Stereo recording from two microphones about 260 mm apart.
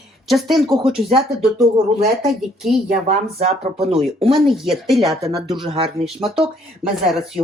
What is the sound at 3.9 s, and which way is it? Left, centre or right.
Speech, right.